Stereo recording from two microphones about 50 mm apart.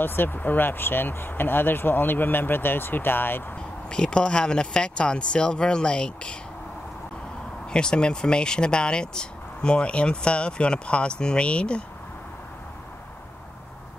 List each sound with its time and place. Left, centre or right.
0.0 s speech: left
3.9 s speech: centre
7.7 s speech: centre